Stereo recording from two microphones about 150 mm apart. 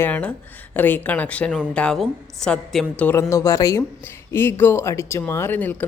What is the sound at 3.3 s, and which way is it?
A woman's voice, 20° left (ahead or behind).